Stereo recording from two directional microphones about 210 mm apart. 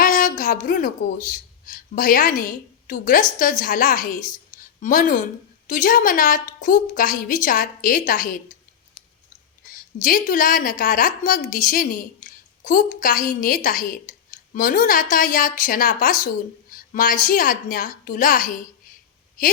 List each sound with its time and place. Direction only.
0.0 s a sound: 40° left (ahead or behind)
1.6 s a woman's voice: 40° left (ahead or behind)
9.6 s a woman's voice: 40° left (ahead or behind)